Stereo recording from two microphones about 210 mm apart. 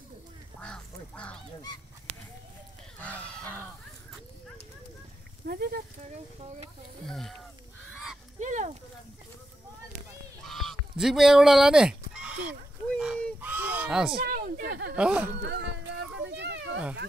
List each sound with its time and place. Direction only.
0.6 s duck: 5° left (ahead or behind)
3.0 s speech: 5° left (ahead or behind)
5.5 s speech: 45° right (ahead or behind)
7.1 s speech: centre (ahead or behind)
7.9 s goose: centre (ahead or behind)
8.4 s speech: 35° right (ahead or behind)
10.4 s fowl: centre (ahead or behind)
12.9 s a sound: 5° right (ahead or behind)
14.2 s a sound: 45° right (ahead or behind)
15.0 s speech: 5° right (ahead or behind)
15.4 s a sound: 60° right (ahead or behind)